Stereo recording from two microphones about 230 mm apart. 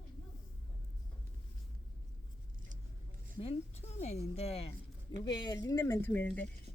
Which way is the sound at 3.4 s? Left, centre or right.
Left.